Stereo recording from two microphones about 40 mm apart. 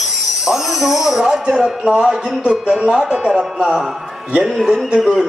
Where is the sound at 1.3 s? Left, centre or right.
Right.